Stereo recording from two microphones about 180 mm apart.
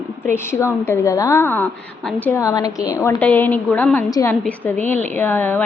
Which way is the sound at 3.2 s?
10° left (ahead or behind).